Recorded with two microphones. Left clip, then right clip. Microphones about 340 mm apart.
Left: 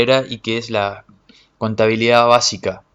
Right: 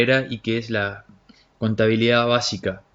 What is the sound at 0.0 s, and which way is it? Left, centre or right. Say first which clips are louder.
Speech: left 4 dB; centre.